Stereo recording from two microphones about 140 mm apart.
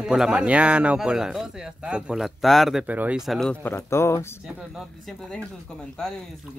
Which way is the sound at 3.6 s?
15° left (ahead or behind).